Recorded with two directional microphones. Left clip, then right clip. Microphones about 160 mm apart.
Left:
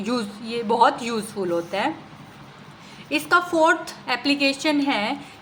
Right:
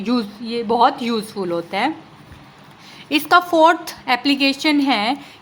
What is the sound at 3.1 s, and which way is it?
A woman's voice, 40° right (ahead or behind).